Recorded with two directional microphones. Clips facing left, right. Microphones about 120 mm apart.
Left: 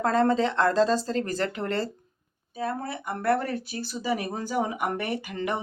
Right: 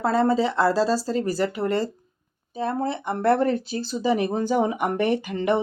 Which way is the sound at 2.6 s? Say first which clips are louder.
Right 5 dB; 25° right (ahead or behind).